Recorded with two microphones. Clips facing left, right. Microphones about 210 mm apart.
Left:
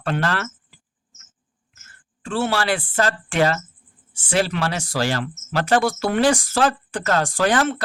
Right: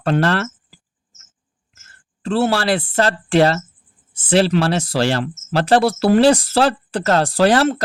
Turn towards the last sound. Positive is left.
turn(degrees=-40)  # may be behind; listen again after turning